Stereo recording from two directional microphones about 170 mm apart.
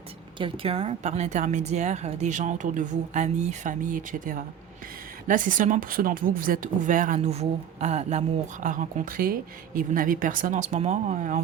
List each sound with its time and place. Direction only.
0.3 s a woman's voice: 30° right (ahead or behind); by 7.2 s 50° right (ahead or behind)
7.2 s a woman's voice: 40° right (ahead or behind)